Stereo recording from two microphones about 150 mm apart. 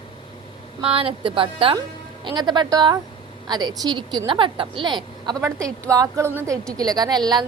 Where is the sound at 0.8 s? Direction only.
40° right (ahead or behind).